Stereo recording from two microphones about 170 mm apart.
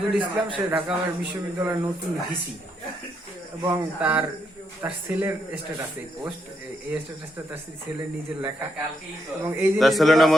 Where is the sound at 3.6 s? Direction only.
10° right (ahead or behind).